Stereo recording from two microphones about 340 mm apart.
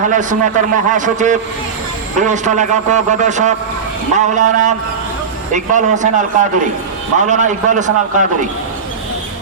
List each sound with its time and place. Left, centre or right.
0.1 s a man's voice: right